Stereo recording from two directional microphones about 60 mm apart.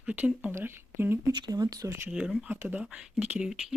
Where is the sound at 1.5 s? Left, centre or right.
Right.